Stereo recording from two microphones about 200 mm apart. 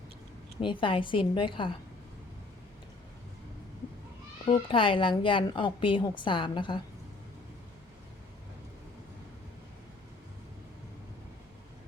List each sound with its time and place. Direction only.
0.6 s a woman's voice: 25° left (ahead or behind)
4.4 s a woman's voice: 25° left (ahead or behind)